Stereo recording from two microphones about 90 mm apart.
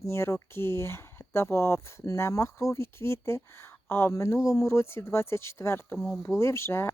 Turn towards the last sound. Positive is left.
turn(degrees=30)  # may be behind; listen again after turning